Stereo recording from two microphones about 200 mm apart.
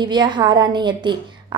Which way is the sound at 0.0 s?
20° right (ahead or behind).